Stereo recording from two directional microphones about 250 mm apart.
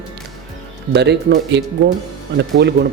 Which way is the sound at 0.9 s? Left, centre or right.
Right.